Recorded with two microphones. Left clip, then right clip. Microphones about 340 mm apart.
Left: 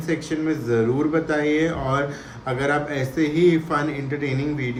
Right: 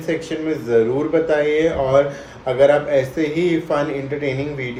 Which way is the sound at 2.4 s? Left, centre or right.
Centre.